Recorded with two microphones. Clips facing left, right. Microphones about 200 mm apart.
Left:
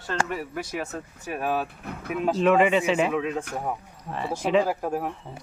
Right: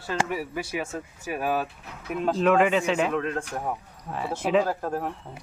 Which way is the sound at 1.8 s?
55° left (ahead or behind).